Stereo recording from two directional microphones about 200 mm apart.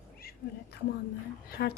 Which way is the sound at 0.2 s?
50° left (ahead or behind).